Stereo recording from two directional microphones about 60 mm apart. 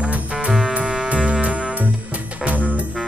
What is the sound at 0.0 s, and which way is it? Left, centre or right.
Music, centre.